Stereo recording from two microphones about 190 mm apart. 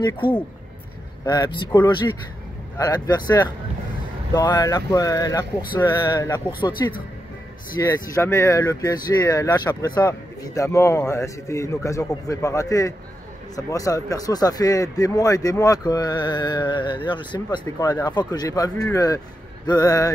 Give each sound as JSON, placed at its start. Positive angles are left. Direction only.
{"t": 0.0, "sound": "speech", "side_deg": 25}